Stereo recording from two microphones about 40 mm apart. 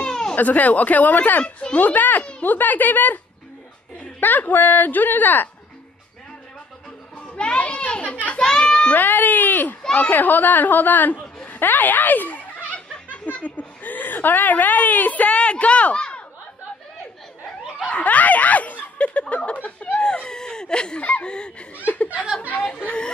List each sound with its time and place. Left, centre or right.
0.0 s a sound: centre
0.4 s a woman's voice: left
1.4 s speech: left
1.8 s a woman's voice: left
4.2 s a woman's voice: left
7.3 s a child's voice: left
8.4 s speech: centre
8.9 s a woman's voice: left
17.8 s a woman's voice: left
20.0 s a sound: left
21.0 s speech: left
21.8 s a woman's voice: left